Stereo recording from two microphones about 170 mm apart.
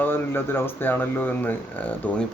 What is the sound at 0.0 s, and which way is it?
Speech, 10° left (ahead or behind).